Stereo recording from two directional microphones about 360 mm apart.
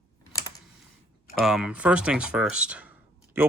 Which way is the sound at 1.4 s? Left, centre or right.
Centre.